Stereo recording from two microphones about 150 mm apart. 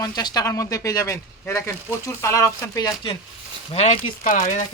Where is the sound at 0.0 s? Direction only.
25° left (ahead or behind).